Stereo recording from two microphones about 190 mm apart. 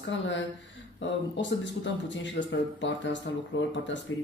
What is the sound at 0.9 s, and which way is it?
Speech, 70° left (ahead or behind).